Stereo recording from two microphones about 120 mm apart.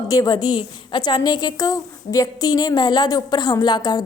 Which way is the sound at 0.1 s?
30° left (ahead or behind).